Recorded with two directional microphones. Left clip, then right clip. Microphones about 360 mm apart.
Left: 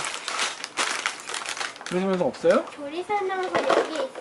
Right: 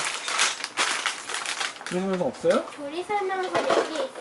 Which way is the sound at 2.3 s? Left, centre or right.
Centre.